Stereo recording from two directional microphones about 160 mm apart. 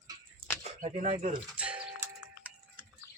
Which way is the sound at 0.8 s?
45° right (ahead or behind).